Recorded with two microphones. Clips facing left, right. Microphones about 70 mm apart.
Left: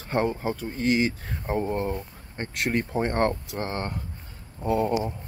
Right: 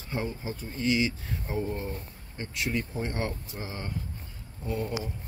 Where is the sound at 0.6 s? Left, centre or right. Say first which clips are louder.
Left 3 dB; left.